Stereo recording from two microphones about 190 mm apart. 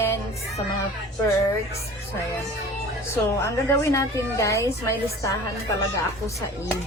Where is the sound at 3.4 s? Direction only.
15° left (ahead or behind).